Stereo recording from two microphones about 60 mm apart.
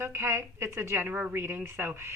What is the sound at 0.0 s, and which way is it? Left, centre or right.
A woman's voice, right.